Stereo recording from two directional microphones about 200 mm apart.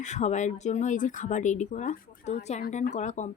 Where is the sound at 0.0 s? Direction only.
35° left (ahead or behind).